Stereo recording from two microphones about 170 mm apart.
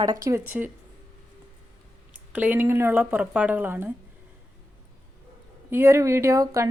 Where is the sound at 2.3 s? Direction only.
10° right (ahead or behind).